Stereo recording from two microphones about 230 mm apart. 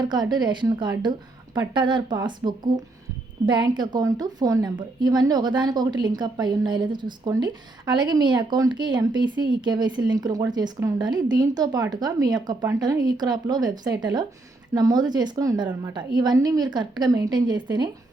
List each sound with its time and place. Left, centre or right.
0.0 s speech: centre